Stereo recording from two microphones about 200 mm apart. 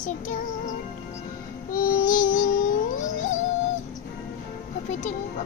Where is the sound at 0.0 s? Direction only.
40° left (ahead or behind).